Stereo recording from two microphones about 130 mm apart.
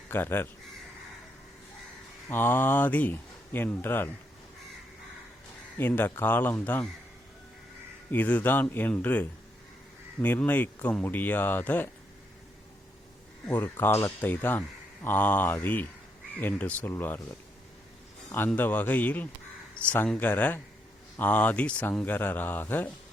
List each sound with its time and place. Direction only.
0.1 s speech: 15° left (ahead or behind)
2.3 s speech: 15° left (ahead or behind)
5.7 s speech: 15° left (ahead or behind)
8.1 s speech: 10° left (ahead or behind)
13.5 s speech: 15° left (ahead or behind)
18.3 s speech: 15° left (ahead or behind)